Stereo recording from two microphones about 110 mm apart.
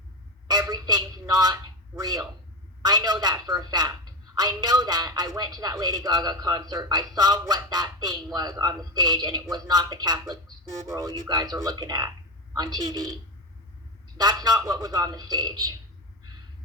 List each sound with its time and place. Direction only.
0.7 s a sound: 35° right (ahead or behind)
2.0 s a woman's voice: 35° right (ahead or behind)
14.2 s a woman's voice: 35° right (ahead or behind)